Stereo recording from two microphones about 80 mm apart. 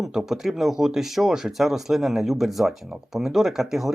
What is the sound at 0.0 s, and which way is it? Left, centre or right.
Speech, centre.